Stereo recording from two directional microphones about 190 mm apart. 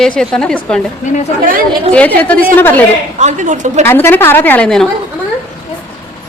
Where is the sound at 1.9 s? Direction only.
10° left (ahead or behind).